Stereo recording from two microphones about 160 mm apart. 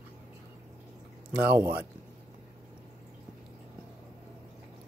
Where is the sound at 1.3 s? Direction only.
10° right (ahead or behind).